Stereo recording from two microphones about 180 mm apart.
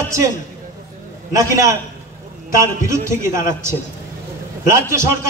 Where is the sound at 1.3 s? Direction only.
15° right (ahead or behind).